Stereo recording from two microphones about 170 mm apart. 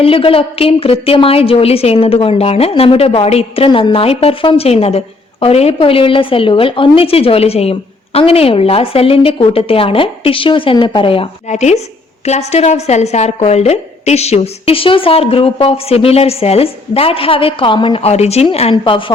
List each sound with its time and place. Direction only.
0.0 s a woman's voice: 35° left (ahead or behind)